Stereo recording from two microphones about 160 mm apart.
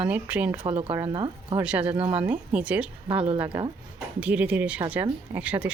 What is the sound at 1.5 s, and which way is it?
Speech, 10° right (ahead or behind).